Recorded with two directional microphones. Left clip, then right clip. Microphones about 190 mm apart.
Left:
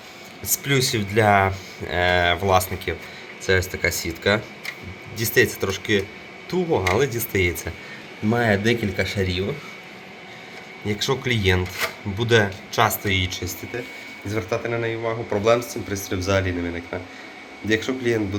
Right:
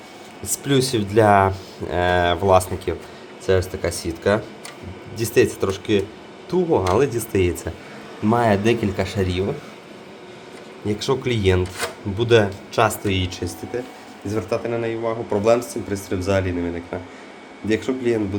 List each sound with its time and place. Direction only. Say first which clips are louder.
0.4 s speech: right 1 dB; 10° right (ahead or behind)
8.4 s speech: right 2 dB; 15° right (ahead or behind)
10.8 s speech: right 1 dB; 10° right (ahead or behind)